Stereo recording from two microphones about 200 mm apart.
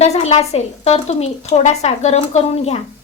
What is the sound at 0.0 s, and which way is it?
Speech, 30° left (ahead or behind).